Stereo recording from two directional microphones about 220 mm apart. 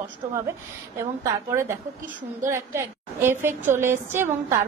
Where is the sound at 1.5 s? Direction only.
10° right (ahead or behind).